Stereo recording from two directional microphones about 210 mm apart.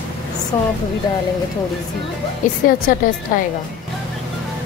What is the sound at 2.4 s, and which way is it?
A woman's voice, 40° left (ahead or behind).